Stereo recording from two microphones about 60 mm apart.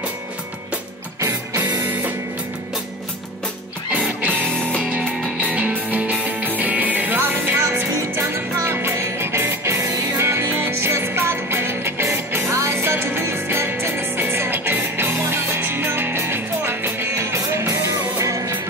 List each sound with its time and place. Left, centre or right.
1.8 s music: right
5.4 s music: right
7.9 s music: right